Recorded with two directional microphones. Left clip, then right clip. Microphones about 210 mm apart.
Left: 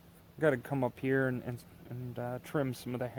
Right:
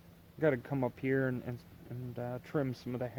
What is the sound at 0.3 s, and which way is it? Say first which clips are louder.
Speech: left 1 dB; 30° left (ahead or behind).